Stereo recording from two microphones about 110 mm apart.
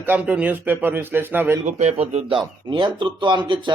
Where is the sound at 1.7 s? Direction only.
90° right.